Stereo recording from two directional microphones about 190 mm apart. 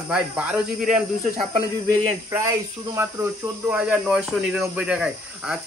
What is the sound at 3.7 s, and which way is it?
Speech, 5° right (ahead or behind).